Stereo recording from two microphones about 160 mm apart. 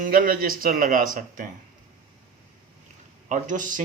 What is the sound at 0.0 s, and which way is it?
Speech, 60° right (ahead or behind).